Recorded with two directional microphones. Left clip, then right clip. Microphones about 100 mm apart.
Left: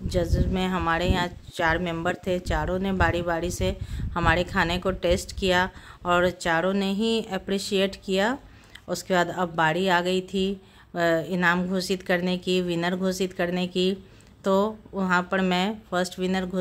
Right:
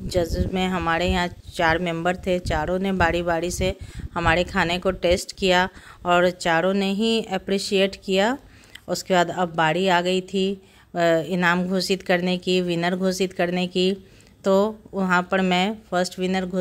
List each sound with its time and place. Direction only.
0.1 s a woman's voice: 40° right (ahead or behind); by 16.4 s 25° right (ahead or behind)